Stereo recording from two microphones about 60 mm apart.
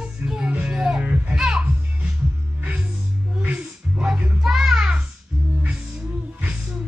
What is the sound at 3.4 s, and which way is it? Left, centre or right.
Music, centre.